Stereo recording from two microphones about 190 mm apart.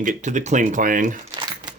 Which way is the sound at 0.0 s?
40° right (ahead or behind).